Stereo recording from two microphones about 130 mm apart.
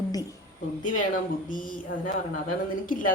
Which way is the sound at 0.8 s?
90° left.